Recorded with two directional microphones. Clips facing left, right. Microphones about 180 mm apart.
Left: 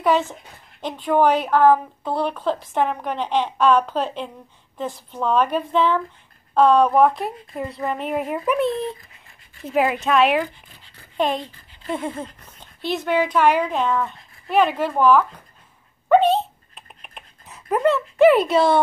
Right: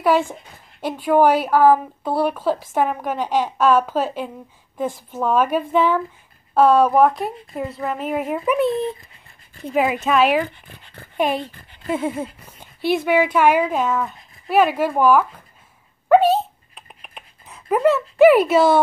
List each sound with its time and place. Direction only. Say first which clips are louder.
0.0 s a woman's voice: right 2 dB; 10° right (ahead or behind)
10.5 s speech: right 6 dB; 60° right (ahead or behind)
11.1 s a child's voice: right 1 dB; 10° right (ahead or behind)
16.1 s a sound: right 2 dB; 5° right (ahead or behind)
18.2 s a woman's voice: right 2 dB; 5° right (ahead or behind)